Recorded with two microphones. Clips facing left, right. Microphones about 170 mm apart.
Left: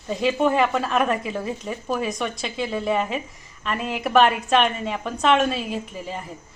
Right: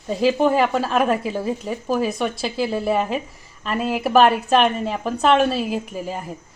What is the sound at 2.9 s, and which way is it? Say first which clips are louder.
Speech: right 1 dB; 35° right (ahead or behind).